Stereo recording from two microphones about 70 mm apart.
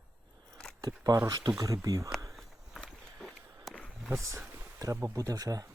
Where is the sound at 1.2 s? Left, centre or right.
Right.